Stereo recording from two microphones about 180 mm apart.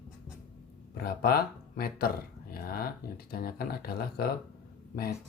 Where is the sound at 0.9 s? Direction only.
55° left (ahead or behind).